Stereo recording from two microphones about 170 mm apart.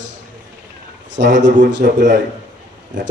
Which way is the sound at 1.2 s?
65° right (ahead or behind).